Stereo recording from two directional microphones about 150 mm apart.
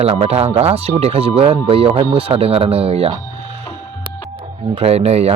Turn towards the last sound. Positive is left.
turn(degrees=-45)  # may be behind; listen again after turning